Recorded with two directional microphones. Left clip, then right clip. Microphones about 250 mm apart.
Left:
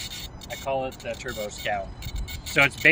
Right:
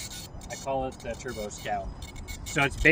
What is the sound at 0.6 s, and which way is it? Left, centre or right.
Speech, centre.